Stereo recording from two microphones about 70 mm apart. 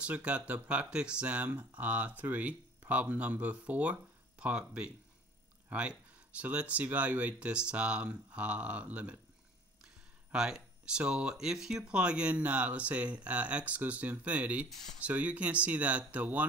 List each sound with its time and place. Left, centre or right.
0.0 s speech: centre
10.3 s speech: centre